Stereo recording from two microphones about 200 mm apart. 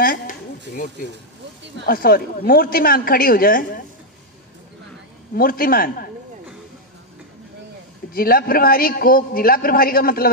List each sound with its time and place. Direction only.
0.0 s a sound: 45° left (ahead or behind)
1.9 s a man's voice: 45° left (ahead or behind)
5.3 s a man's voice: 45° left (ahead or behind)
8.1 s a man's voice: 45° left (ahead or behind)